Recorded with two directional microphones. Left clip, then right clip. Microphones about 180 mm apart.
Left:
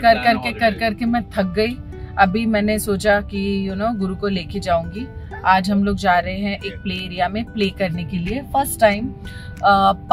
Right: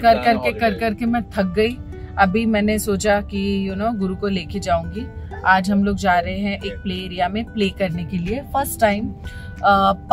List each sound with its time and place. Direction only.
0.0 s a woman's voice: 30° left (ahead or behind)